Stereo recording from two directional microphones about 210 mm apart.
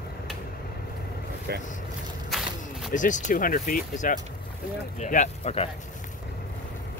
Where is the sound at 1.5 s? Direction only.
50° right (ahead or behind).